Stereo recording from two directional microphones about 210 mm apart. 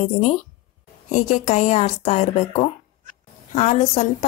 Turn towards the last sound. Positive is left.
turn(degrees=35)  # may be behind; listen again after turning